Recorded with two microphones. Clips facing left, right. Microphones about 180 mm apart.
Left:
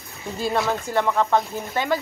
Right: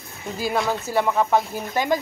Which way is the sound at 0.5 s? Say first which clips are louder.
Even; centre (ahead or behind).